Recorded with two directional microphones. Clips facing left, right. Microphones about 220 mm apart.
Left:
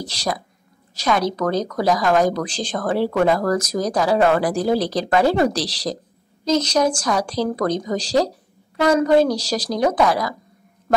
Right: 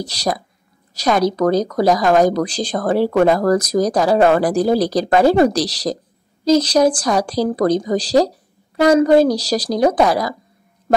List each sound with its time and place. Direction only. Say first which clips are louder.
0.0 s speech: right 4 dB; 40° right (ahead or behind)